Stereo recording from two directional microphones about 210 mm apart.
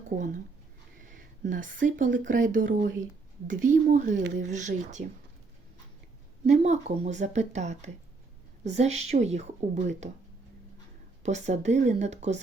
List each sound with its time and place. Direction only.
1.0 s speech: 40° right (ahead or behind)
6.5 s speech: 35° right (ahead or behind)
11.2 s speech: 35° right (ahead or behind)